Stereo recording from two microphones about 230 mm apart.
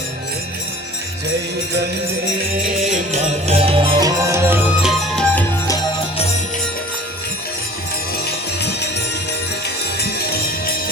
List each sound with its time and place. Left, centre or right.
2.8 s music: right; by 5.8 s centre
8.3 s music: left